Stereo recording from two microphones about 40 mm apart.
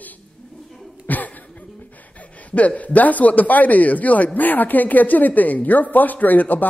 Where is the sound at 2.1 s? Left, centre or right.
Left.